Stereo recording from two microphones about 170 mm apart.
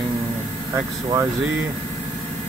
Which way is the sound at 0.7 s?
15° right (ahead or behind).